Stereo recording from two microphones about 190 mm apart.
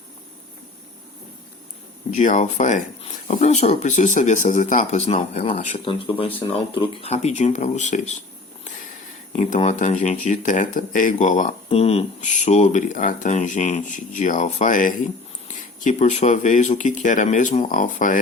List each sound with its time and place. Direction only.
2.0 s speech: 40° left (ahead or behind)
9.3 s speech: 35° left (ahead or behind)